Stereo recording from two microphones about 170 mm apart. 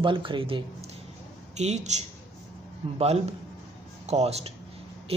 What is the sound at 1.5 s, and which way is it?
A woman's voice, 40° right (ahead or behind).